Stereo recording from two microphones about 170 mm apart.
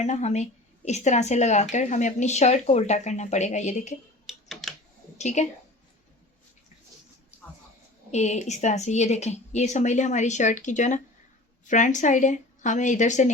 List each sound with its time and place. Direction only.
0.0 s a woman's voice: 40° left (ahead or behind)
4.3 s typing: centre (ahead or behind)
5.1 s a woman's voice: 40° left (ahead or behind)
8.1 s speech: 40° left (ahead or behind)